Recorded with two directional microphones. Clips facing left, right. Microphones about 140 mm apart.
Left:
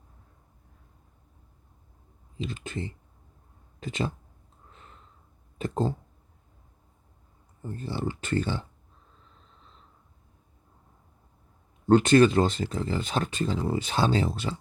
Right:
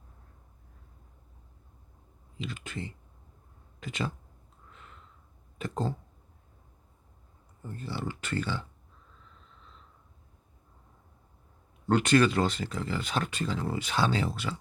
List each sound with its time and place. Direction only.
2.4 s speech: 30° left (ahead or behind)
4.7 s a sound: 35° left (ahead or behind)
7.7 s speech: 30° left (ahead or behind)
11.9 s speech: 25° left (ahead or behind)